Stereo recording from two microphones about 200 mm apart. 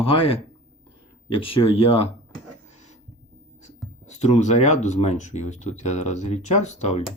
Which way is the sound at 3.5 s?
35° left (ahead or behind).